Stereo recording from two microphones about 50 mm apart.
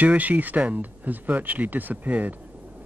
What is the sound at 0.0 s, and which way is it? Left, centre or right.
Speech, right.